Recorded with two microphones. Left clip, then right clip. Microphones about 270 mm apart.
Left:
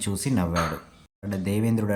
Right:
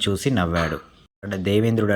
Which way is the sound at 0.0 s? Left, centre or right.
Centre.